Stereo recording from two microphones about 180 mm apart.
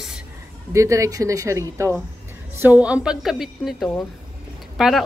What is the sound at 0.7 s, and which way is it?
Speech, 15° right (ahead or behind).